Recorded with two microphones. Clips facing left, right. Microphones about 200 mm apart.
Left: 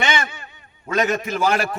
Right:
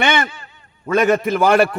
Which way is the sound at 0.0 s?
60° right (ahead or behind).